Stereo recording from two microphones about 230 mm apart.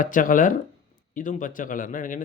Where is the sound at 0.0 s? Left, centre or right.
Left.